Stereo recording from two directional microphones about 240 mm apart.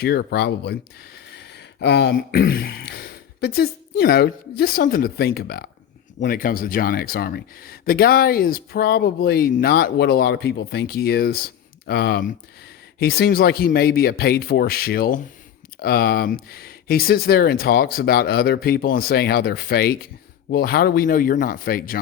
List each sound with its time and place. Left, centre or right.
0.0 s speech: left